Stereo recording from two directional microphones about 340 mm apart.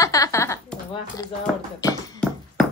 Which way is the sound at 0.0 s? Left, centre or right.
Centre.